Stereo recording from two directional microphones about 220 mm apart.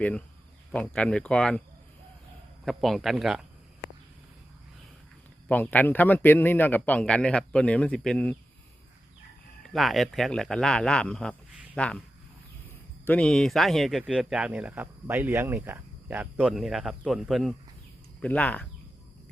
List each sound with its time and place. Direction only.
0.7 s speech: 5° left (ahead or behind)
2.6 s speech: centre (ahead or behind)
5.5 s a man's voice: 5° left (ahead or behind)
9.7 s speech: centre (ahead or behind)
13.1 s a man's voice: 5° left (ahead or behind)